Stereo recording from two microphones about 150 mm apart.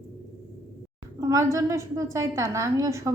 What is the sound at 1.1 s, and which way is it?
A woman's voice, 20° right (ahead or behind).